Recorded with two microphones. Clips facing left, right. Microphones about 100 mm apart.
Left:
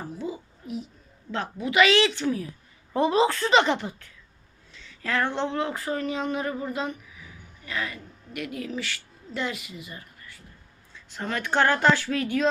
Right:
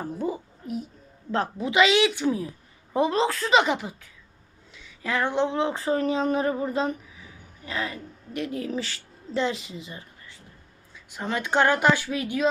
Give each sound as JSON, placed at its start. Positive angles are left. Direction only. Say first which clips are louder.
{"t": 0.2, "sound": "a child's voice", "louder": "right 4 dB", "side_deg": -50}
{"t": 1.3, "sound": "a woman's voice", "louder": "right 3 dB", "side_deg": -35}
{"t": 1.7, "sound": "a woman's voice", "louder": "even", "side_deg": -20}
{"t": 3.0, "sound": "a woman's voice", "louder": "left 2 dB", "side_deg": 0}